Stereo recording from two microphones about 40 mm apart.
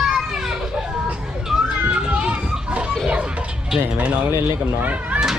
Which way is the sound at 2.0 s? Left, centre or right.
Right.